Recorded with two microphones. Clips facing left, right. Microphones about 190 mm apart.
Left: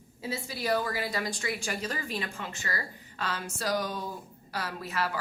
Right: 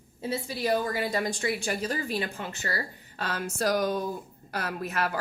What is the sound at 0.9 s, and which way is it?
A woman's voice, 45° right (ahead or behind).